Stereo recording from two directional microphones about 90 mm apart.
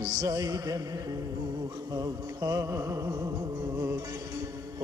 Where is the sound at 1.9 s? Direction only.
45° right (ahead or behind).